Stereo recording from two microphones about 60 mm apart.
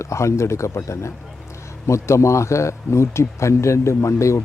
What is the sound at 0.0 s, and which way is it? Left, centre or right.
A man's voice, left.